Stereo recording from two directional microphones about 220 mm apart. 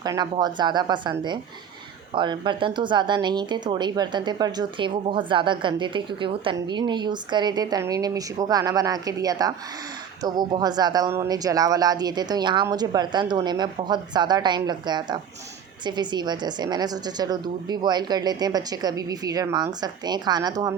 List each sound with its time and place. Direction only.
0.0 s a woman's voice: 20° right (ahead or behind)